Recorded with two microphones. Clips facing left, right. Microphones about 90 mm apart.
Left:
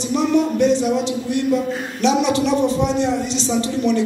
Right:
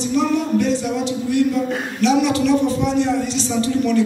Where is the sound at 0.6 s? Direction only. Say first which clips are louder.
Left 3 dB; 20° left (ahead or behind).